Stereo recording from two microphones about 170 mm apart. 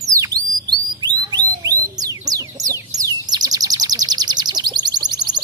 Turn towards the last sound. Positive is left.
turn(degrees=-25)  # may be behind; listen again after turning